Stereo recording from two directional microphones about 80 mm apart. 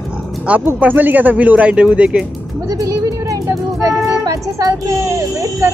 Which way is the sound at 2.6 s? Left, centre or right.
Right.